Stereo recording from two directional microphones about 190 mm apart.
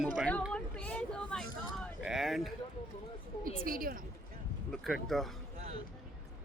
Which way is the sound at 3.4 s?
50° right (ahead or behind).